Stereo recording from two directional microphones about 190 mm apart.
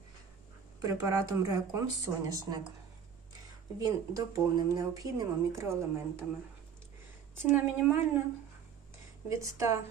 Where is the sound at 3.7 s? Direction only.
20° right (ahead or behind).